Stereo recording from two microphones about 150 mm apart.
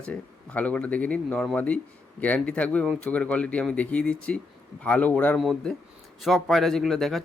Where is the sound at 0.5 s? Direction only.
10° left (ahead or behind).